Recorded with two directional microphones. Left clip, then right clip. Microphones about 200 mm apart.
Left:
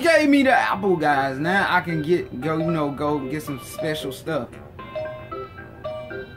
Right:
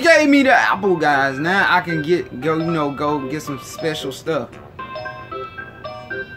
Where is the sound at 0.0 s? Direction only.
15° right (ahead or behind).